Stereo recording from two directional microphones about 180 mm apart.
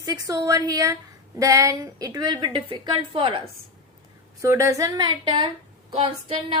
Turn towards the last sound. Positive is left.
turn(degrees=-30)  # may be behind; listen again after turning